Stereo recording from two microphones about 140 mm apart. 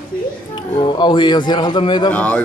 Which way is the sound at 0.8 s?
35° left (ahead or behind).